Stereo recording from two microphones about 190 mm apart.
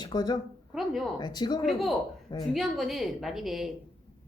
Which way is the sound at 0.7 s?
Centre (ahead or behind).